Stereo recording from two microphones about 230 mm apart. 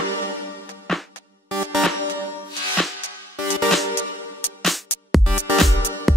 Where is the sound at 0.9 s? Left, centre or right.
Centre.